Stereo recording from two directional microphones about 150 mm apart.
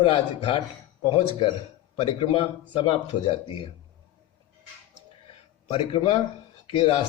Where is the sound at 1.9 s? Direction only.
40° left (ahead or behind).